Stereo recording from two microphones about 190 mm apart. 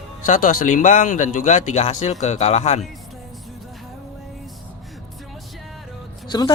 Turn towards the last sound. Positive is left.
turn(degrees=20)  # may be behind; listen again after turning